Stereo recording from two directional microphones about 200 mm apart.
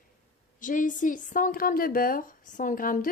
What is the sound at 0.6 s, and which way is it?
A woman's voice, 40° left (ahead or behind).